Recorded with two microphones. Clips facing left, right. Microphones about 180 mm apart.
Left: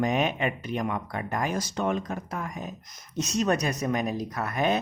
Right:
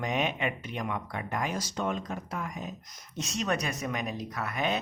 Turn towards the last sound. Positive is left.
turn(degrees=45)  # may be behind; listen again after turning